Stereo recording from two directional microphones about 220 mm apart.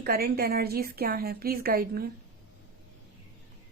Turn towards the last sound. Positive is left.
turn(degrees=-45)  # may be behind; listen again after turning